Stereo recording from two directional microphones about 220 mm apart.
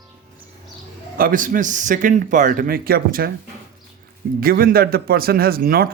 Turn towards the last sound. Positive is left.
turn(degrees=-40)  # may be behind; listen again after turning